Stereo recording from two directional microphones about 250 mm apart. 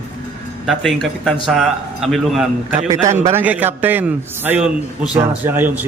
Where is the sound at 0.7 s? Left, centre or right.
Centre.